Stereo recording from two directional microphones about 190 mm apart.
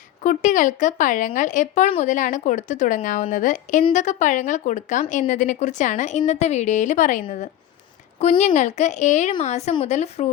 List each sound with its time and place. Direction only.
0.2 s speech: 40° left (ahead or behind)